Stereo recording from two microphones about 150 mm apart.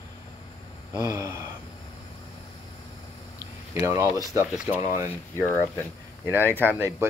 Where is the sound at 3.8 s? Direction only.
20° right (ahead or behind).